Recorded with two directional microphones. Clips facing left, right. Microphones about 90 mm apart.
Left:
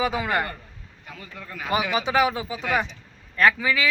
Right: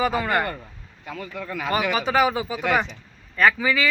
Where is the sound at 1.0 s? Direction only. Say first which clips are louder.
Right 8 dB; 90° right.